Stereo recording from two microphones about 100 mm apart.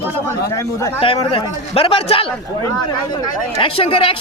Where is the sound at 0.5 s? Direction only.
30° left (ahead or behind).